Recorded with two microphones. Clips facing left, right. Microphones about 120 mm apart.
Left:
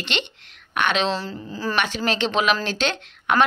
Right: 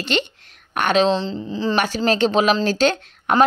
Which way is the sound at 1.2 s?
25° right (ahead or behind).